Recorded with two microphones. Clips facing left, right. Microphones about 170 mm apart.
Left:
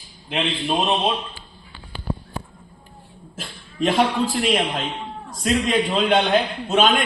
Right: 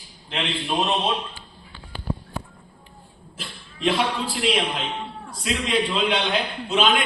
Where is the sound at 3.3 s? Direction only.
45° left (ahead or behind).